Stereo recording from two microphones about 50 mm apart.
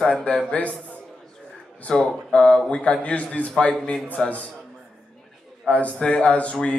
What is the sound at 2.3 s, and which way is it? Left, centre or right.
Speech, left.